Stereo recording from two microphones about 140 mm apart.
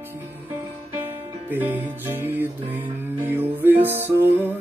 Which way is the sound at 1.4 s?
15° right (ahead or behind).